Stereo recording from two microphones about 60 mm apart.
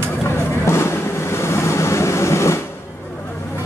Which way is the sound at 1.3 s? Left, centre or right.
Left.